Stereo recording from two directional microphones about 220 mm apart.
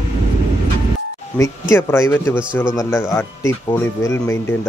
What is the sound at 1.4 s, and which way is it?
Speech, 10° left (ahead or behind).